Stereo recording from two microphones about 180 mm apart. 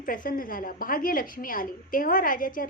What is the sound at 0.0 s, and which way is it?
A woman's voice, 50° left (ahead or behind).